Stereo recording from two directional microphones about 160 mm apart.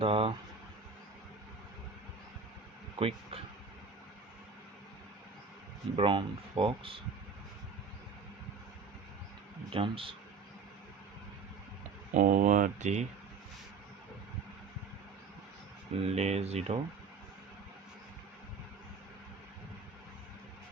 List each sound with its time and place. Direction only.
0.0 s speech: 35° right (ahead or behind)
2.9 s a sound: 35° right (ahead or behind)
6.0 s speech: 35° right (ahead or behind)
9.7 s speech: 35° right (ahead or behind)
12.1 s speech: 50° right (ahead or behind)
16.0 s speech: 40° right (ahead or behind)